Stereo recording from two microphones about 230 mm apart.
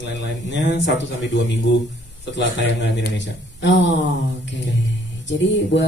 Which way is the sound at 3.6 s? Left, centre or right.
Left.